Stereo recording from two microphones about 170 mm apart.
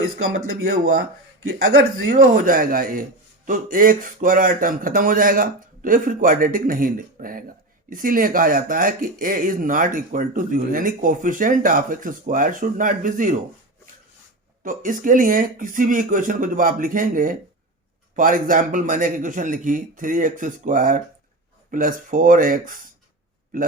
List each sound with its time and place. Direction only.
1.8 s speech: 55° right (ahead or behind)
14.6 s speech: 50° right (ahead or behind)